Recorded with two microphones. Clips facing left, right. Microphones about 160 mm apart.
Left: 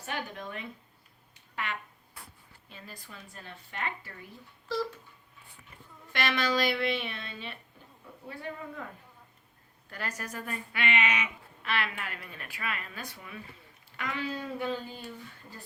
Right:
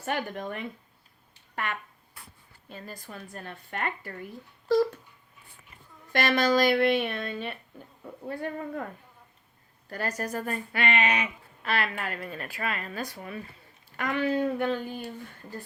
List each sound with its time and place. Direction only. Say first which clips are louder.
0.0 s a woman's voice: right 6 dB; 50° right (ahead or behind)
2.6 s a woman's voice: right 7 dB; 45° right (ahead or behind)
6.1 s a woman's voice: right 6 dB; 45° right (ahead or behind)
9.9 s a woman's voice: right 7 dB; 40° right (ahead or behind); by 15.0 s 60° right (ahead or behind)